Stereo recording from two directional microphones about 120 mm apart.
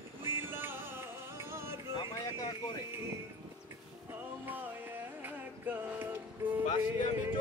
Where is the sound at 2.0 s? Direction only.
40° left (ahead or behind).